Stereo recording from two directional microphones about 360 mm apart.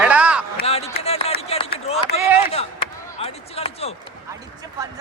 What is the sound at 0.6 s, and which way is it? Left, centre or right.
Speech, centre.